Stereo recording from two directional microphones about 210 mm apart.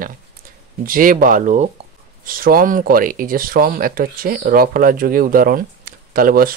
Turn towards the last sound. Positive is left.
turn(degrees=-45)  # may be behind; listen again after turning